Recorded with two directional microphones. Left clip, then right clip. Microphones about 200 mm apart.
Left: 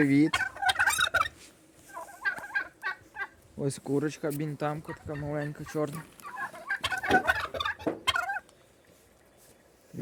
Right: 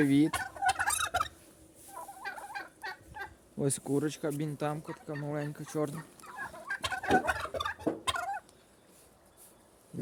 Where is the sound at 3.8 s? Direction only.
5° left (ahead or behind).